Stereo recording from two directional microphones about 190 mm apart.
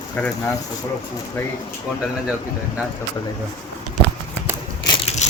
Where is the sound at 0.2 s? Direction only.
10° left (ahead or behind).